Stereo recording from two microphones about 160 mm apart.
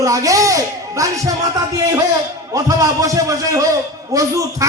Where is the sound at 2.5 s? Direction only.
20° right (ahead or behind).